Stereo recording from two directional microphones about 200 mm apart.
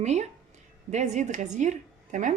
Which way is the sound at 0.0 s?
35° right (ahead or behind).